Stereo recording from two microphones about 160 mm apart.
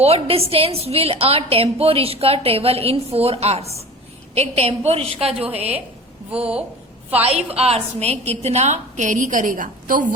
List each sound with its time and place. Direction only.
0.0 s a woman's voice: 40° right (ahead or behind)
7.3 s a woman's voice: 40° right (ahead or behind); by 10.1 s 60° right (ahead or behind)